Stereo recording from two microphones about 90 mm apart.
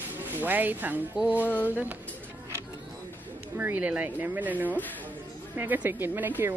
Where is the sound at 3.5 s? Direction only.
20° right (ahead or behind).